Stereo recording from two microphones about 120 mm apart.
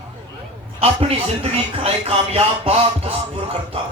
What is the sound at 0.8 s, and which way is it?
Speech, 55° right (ahead or behind).